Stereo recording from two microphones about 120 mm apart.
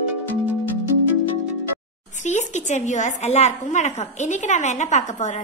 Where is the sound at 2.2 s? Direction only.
80° left.